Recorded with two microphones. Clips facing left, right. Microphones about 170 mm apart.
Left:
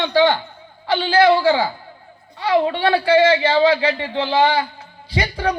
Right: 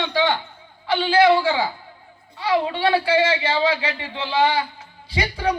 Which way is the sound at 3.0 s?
30° left (ahead or behind).